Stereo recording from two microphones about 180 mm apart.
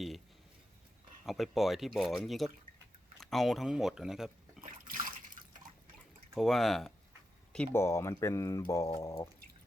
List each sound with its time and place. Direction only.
1.2 s speech: centre (ahead or behind)
4.6 s water: 50° right (ahead or behind)
6.3 s speech: centre (ahead or behind); by 9.2 s 20° left (ahead or behind)